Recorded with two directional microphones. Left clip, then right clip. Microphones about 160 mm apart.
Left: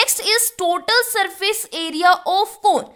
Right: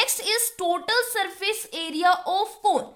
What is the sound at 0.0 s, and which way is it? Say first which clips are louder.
A woman's voice: left 6 dB; 55° left (ahead or behind).